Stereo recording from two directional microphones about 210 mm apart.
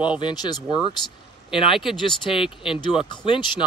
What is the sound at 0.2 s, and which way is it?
Speech, 20° left (ahead or behind).